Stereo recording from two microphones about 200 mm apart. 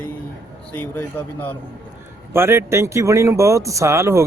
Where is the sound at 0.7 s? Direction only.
10° left (ahead or behind).